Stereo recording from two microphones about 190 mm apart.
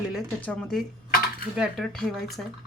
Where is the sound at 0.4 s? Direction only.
5° left (ahead or behind).